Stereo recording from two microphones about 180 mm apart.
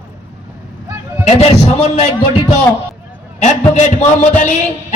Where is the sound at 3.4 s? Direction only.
40° left (ahead or behind).